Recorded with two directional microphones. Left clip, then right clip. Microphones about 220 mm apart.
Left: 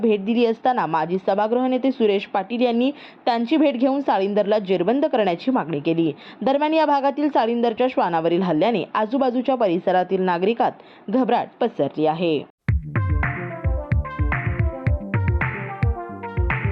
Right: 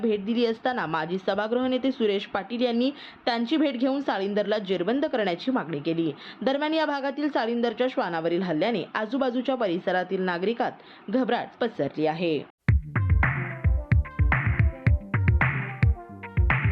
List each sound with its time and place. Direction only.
0.0 s a woman's voice: 10° left (ahead or behind)
13.9 s music: centre (ahead or behind)